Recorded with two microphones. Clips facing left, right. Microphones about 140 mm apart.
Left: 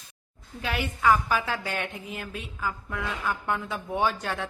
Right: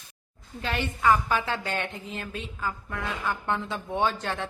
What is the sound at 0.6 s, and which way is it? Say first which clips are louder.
A woman's voice: even; 10° left (ahead or behind).